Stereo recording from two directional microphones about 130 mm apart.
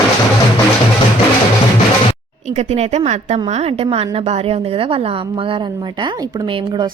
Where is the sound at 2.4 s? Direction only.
60° right (ahead or behind).